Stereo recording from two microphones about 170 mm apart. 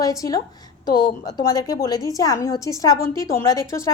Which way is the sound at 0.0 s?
20° left (ahead or behind).